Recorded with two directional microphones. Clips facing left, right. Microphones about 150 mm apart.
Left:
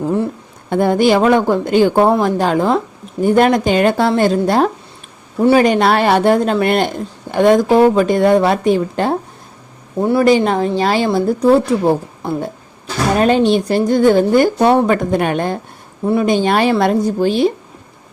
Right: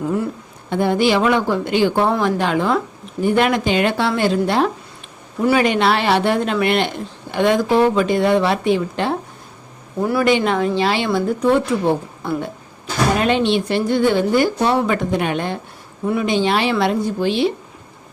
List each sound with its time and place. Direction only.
0.0 s speech: 30° left (ahead or behind)
0.7 s a woman's voice: 45° left (ahead or behind)
5.4 s speech: 30° left (ahead or behind)
5.6 s a woman's voice: 45° left (ahead or behind)
10.0 s speech: 25° left (ahead or behind)
10.2 s a woman's voice: 40° left (ahead or behind)